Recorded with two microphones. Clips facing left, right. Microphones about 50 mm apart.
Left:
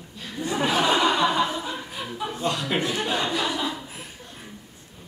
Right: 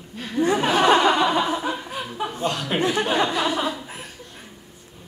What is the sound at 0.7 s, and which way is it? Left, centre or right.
Chuckle, right.